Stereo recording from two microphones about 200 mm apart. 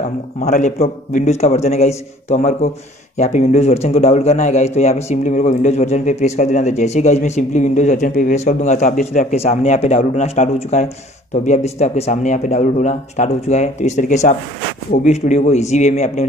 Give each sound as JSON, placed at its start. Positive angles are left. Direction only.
{"t": 0.4, "sound": "a man's voice", "side_deg": 35}